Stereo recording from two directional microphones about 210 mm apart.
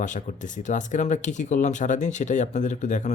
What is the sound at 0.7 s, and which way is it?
Speech, 35° left (ahead or behind).